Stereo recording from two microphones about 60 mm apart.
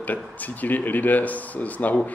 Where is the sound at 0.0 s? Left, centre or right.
Left.